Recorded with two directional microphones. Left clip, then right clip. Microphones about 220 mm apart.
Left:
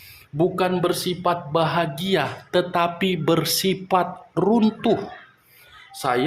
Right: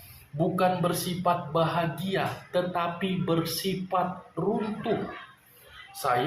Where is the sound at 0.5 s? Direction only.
45° left (ahead or behind).